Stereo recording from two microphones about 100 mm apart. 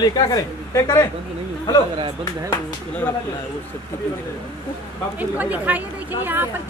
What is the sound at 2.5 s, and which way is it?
Speech, 20° left (ahead or behind).